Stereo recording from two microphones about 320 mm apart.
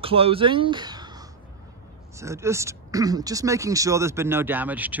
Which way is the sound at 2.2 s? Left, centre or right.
Centre.